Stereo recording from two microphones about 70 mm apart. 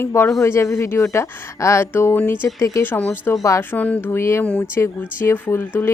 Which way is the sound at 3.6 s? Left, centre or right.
Left.